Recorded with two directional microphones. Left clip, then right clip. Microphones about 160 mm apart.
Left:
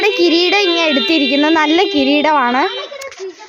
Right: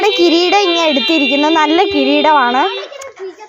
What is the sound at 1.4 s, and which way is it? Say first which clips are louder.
A woman's voice: right 2 dB; 15° left (ahead or behind).